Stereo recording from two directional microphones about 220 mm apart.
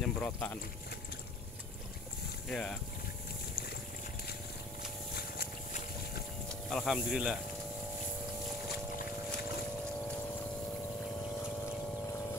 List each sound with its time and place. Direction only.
0.0 s speech: 5° left (ahead or behind)
2.4 s speech: 5° left (ahead or behind)
5.1 s boat: 45° left (ahead or behind)
6.7 s speech: centre (ahead or behind)